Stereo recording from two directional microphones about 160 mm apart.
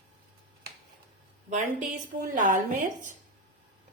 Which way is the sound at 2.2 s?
55° right (ahead or behind).